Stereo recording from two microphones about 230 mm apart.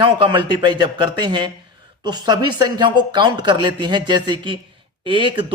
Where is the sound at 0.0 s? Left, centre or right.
Right.